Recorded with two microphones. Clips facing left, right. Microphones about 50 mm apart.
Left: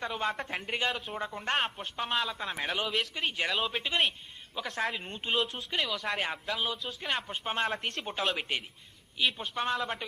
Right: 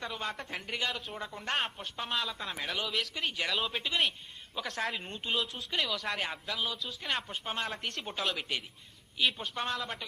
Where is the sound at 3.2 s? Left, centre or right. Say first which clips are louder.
Left 2 dB; left.